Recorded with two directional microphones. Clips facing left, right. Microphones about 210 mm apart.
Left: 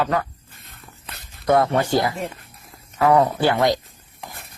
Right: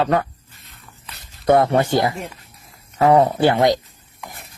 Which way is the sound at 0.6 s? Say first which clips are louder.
Left 1 dB; 55° left (ahead or behind).